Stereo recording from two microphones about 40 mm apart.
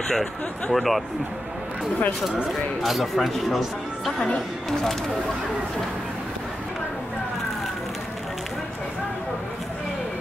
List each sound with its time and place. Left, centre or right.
0.1 s speech: centre
2.8 s speech: centre